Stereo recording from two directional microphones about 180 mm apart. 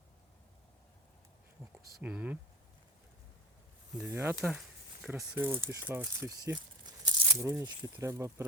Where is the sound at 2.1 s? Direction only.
5° right (ahead or behind).